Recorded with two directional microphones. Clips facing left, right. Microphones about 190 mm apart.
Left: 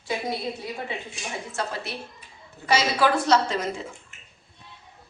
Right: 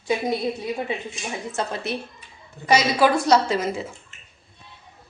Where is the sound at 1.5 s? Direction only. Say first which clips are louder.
Right 5 dB; 20° right (ahead or behind).